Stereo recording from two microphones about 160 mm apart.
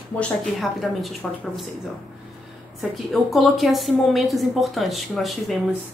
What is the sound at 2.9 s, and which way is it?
Speech, centre (ahead or behind).